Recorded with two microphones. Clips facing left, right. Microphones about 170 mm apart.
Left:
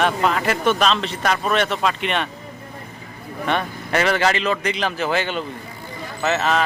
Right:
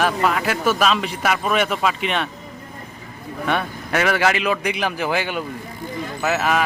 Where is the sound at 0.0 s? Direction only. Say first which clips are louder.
Even; 5° right (ahead or behind).